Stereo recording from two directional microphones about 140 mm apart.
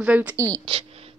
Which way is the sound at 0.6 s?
40° right (ahead or behind).